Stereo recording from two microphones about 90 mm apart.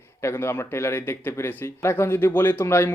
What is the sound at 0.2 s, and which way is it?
Speech, 30° left (ahead or behind).